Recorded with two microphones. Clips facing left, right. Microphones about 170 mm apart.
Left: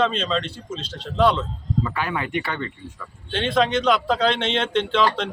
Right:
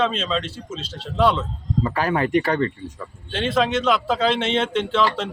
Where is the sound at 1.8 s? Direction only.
40° right (ahead or behind).